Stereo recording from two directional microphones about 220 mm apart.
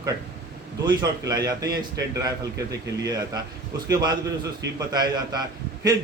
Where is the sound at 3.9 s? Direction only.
20° right (ahead or behind).